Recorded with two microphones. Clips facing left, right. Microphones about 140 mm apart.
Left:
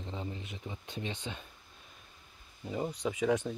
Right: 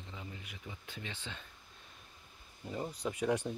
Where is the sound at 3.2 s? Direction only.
10° right (ahead or behind).